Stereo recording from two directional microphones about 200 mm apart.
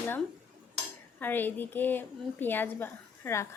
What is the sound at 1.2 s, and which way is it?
A woman's voice, 10° left (ahead or behind).